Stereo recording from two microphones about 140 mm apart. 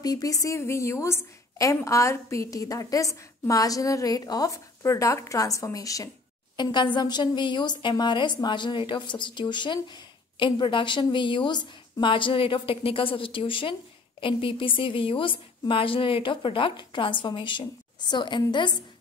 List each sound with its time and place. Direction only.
0.0 s a woman's voice: 25° left (ahead or behind)